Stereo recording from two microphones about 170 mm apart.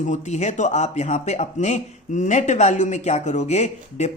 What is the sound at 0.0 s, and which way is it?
Speech, 45° left (ahead or behind).